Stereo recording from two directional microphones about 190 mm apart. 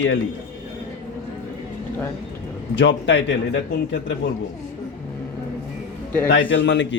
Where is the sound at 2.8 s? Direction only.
70° left (ahead or behind).